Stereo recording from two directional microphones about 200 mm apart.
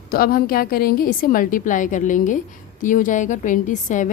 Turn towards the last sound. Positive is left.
turn(degrees=40)  # may be behind; listen again after turning